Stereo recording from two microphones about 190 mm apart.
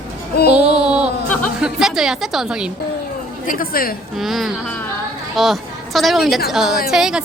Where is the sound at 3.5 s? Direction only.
50° left (ahead or behind).